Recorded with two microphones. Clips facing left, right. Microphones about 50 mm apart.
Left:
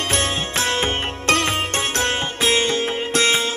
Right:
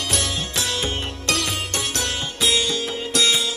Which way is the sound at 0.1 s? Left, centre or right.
Left.